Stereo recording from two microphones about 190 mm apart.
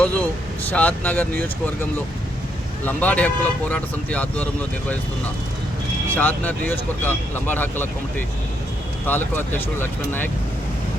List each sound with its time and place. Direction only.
0.0 s vehicle: 5° left (ahead or behind)
0.7 s speech: 10° left (ahead or behind)
2.8 s speech: 10° left (ahead or behind)
6.1 s speech: 10° left (ahead or behind)
9.0 s speech: 10° left (ahead or behind)